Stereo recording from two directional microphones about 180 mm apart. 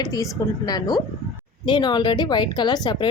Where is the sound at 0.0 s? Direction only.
20° left (ahead or behind).